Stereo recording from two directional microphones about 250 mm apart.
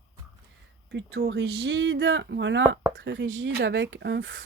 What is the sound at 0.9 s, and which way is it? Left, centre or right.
A woman's voice, right.